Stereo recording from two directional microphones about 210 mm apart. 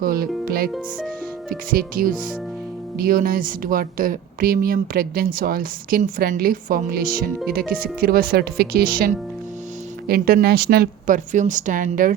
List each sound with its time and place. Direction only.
0.0 s speech: 45° right (ahead or behind)
0.7 s music: centre (ahead or behind)
1.7 s a woman's voice: 40° right (ahead or behind)